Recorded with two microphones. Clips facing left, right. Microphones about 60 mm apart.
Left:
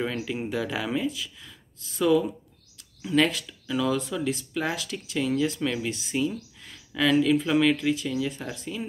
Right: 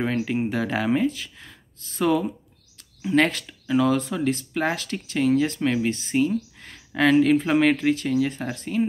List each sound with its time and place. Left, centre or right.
0.0 s speech: right